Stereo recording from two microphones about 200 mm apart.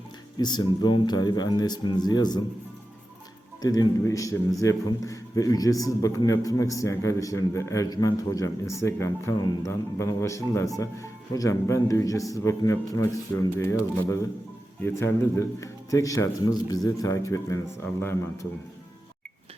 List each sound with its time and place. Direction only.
0.3 s speech: 20° left (ahead or behind)
3.6 s a man's voice: 20° left (ahead or behind)